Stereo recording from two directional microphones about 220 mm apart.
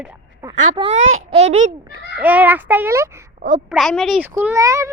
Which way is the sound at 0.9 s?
65° right (ahead or behind).